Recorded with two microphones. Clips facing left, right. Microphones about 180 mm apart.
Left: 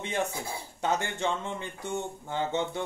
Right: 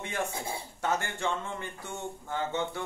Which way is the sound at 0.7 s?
20° left (ahead or behind).